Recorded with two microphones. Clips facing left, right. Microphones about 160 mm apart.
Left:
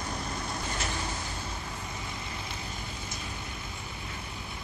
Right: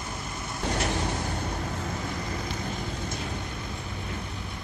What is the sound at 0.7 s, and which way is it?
Vehicle, 65° right (ahead or behind).